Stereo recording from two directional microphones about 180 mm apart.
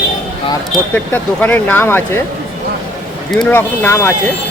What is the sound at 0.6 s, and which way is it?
Speech, 5° left (ahead or behind).